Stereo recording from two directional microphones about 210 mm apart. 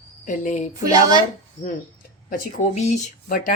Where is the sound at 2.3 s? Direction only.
40° left (ahead or behind).